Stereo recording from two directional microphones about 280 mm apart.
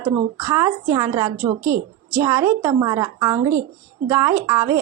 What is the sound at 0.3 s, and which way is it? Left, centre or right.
A woman's voice, centre.